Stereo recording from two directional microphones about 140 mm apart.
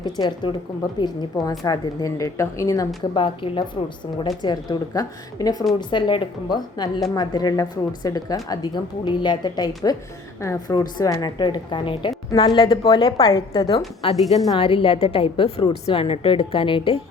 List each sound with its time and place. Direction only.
0.0 s a woman's voice: 30° left (ahead or behind)